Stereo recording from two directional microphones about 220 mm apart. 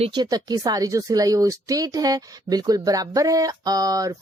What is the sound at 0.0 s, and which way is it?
Speech, 20° right (ahead or behind).